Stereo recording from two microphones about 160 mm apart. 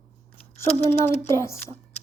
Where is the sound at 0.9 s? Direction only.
40° left (ahead or behind).